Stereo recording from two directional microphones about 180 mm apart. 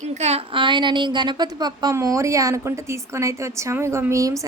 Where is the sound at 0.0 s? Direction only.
40° right (ahead or behind).